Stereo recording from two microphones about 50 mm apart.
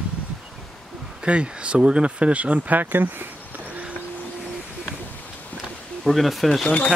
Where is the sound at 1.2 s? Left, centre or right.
Right.